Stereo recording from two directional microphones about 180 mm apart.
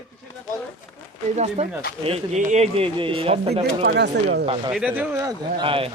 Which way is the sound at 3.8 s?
70° right (ahead or behind).